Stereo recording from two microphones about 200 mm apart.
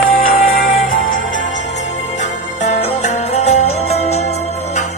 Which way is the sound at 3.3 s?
35° left (ahead or behind).